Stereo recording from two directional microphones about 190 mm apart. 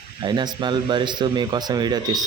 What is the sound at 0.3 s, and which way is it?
Speech, 25° right (ahead or behind).